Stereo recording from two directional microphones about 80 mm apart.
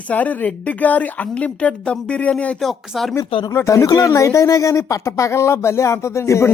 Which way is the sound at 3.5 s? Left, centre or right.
Left.